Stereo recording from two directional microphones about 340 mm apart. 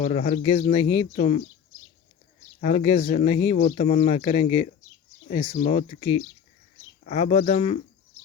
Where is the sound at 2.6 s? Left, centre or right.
Centre.